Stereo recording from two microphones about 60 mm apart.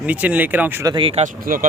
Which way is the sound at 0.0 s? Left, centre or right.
Right.